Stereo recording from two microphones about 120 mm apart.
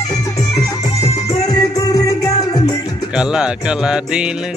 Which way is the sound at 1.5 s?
30° left (ahead or behind).